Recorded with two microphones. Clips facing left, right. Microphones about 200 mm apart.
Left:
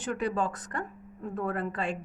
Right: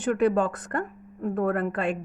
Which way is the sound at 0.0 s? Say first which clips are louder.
Right 8 dB; 55° right (ahead or behind).